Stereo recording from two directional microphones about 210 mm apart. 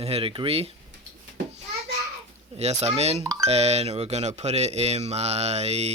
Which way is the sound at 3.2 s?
15° right (ahead or behind).